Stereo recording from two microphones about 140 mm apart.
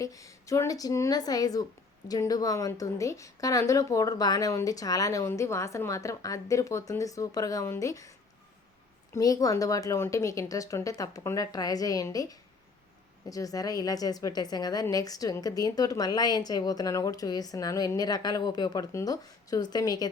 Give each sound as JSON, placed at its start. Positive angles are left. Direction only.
{"t": 0.0, "sound": "a woman's voice", "side_deg": 25}
{"t": 9.1, "sound": "a woman's voice", "side_deg": 25}